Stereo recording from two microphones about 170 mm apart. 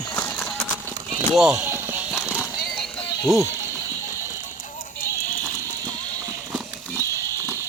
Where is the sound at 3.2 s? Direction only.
15° right (ahead or behind).